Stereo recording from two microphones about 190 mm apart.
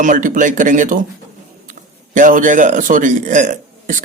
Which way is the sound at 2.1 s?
45° right (ahead or behind).